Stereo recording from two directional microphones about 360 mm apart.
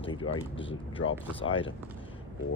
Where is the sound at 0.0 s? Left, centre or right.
Centre.